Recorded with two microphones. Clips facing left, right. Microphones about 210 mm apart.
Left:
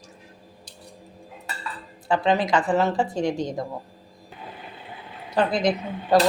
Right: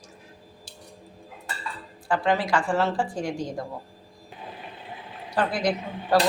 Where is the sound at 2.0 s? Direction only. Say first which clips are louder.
Left 2 dB; 20° left (ahead or behind).